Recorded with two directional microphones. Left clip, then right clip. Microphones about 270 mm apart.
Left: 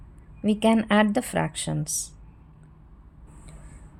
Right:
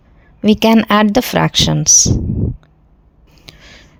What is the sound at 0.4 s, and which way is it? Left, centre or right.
A woman's voice, right.